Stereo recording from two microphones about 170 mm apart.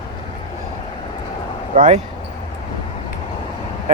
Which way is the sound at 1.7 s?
50° right (ahead or behind).